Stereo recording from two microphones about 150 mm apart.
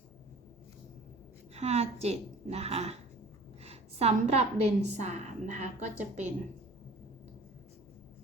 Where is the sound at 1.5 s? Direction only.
45° right (ahead or behind).